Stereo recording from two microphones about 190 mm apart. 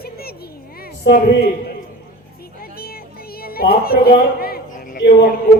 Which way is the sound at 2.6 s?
50° left (ahead or behind).